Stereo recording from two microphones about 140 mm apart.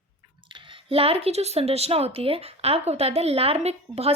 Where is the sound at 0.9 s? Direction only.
45° right (ahead or behind).